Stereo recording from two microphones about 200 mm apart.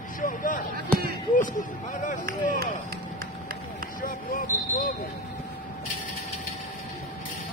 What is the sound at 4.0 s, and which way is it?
Speech, 45° left (ahead or behind).